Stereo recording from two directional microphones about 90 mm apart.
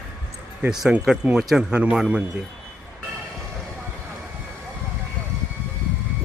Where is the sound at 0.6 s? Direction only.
10° right (ahead or behind).